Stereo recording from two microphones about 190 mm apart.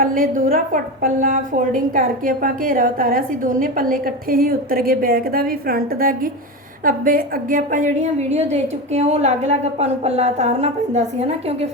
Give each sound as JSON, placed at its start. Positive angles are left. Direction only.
{"t": 0.0, "sound": "a woman's voice", "side_deg": -45}